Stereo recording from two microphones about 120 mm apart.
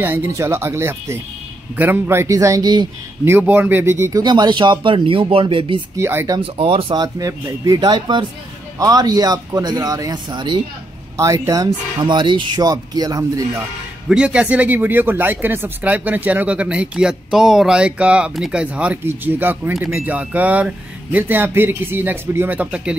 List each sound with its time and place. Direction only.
0.0 s speech: 20° right (ahead or behind); by 2.9 s 35° right (ahead or behind)
3.3 s speech: 15° right (ahead or behind)
4.2 s speech: 35° right (ahead or behind)
5.9 s speech: 20° right (ahead or behind)
6.4 s speech: 50° right (ahead or behind)
11.1 s speech: 25° right (ahead or behind)
14.0 s speech: 10° right (ahead or behind)